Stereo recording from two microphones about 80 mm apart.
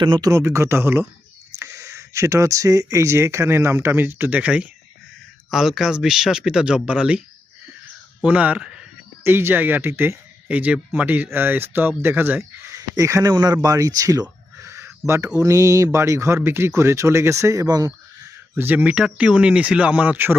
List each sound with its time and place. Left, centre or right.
0.0 s a man's voice: right
0.3 s speech: right; by 4.7 s centre
5.5 s speech: centre
8.2 s speech: centre
9.2 s speech: right
12.6 s speech: right
13.3 s speech: right
15.3 s speech: right
17.7 s speech: right
18.5 s speech: right